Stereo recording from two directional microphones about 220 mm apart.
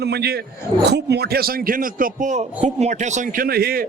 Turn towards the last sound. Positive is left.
turn(degrees=-45)  # may be behind; listen again after turning